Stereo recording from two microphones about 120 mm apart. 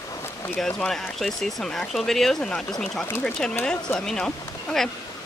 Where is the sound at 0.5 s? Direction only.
5° left (ahead or behind).